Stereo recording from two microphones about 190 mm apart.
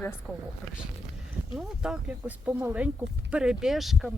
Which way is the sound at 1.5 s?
5° right (ahead or behind).